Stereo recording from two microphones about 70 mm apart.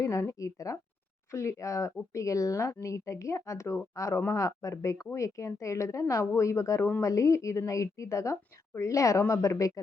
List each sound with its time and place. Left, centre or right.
0.0 s a woman's voice: left